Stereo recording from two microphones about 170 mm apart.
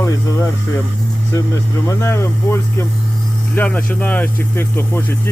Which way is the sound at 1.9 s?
15° left (ahead or behind).